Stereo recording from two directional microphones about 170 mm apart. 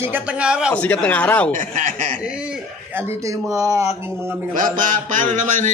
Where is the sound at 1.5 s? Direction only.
50° right (ahead or behind).